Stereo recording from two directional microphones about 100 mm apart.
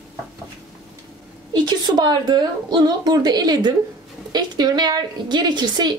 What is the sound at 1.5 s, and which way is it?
A woman's voice, 45° right (ahead or behind).